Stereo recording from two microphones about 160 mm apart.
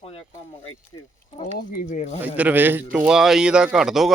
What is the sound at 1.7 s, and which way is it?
Speech, 55° left (ahead or behind).